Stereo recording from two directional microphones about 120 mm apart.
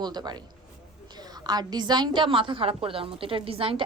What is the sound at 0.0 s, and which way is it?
A woman's voice, 35° right (ahead or behind).